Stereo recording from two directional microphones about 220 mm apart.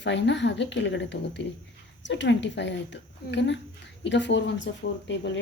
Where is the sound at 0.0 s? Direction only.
55° left (ahead or behind).